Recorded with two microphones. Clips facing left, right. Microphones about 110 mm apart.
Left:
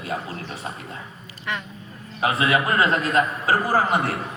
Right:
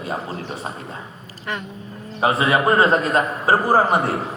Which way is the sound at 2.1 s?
30° right (ahead or behind).